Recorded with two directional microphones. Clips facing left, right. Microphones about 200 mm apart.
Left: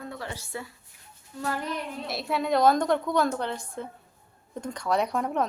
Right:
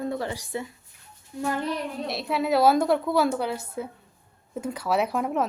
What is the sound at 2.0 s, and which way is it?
A woman's voice, centre (ahead or behind).